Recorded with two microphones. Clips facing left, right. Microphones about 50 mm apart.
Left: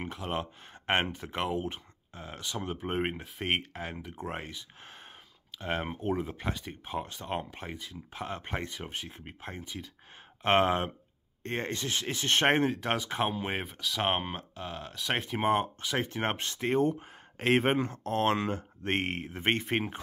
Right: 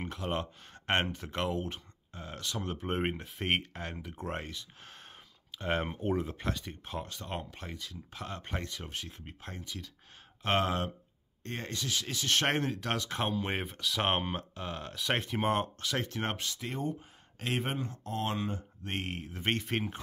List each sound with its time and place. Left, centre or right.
0.0 s speech: centre; by 16.3 s left
16.3 s speech: left
17.7 s speech: left
18.9 s speech: left